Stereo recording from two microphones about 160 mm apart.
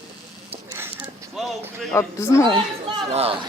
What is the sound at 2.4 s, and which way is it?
Speech, 30° right (ahead or behind).